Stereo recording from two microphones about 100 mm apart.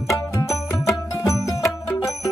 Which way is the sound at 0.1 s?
35° left (ahead or behind).